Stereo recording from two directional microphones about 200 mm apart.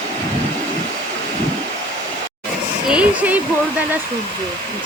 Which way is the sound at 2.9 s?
5° right (ahead or behind).